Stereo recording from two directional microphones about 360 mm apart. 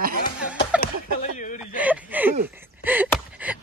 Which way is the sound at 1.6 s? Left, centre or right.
Centre.